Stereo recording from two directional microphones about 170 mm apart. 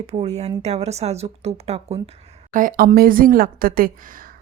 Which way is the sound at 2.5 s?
50° right (ahead or behind).